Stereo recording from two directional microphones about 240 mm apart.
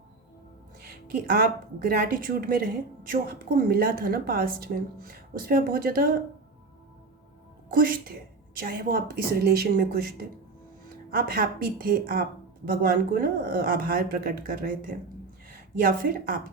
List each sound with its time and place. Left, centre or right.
0.8 s a woman's voice: right
7.7 s a woman's voice: right